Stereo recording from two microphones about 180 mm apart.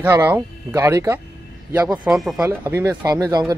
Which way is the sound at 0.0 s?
15° right (ahead or behind).